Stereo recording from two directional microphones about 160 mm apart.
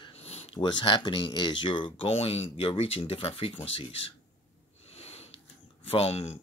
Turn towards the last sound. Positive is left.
turn(degrees=40)  # may be behind; listen again after turning